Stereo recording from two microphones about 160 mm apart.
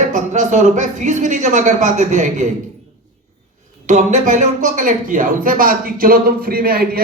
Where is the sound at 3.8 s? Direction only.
50° right (ahead or behind).